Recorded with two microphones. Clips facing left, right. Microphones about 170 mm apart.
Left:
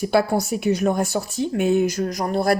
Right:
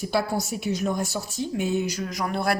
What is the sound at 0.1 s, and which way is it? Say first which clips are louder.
Speech: left 6 dB; 60° left (ahead or behind).